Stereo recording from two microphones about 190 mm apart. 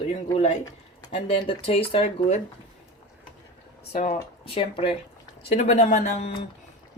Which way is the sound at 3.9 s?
35° left (ahead or behind).